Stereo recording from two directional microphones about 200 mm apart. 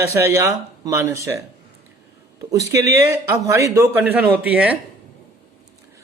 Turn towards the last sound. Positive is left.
turn(degrees=-5)  # may be behind; listen again after turning